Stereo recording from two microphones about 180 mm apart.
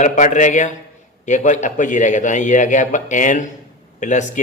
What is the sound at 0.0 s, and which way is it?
A man's voice, 40° left (ahead or behind).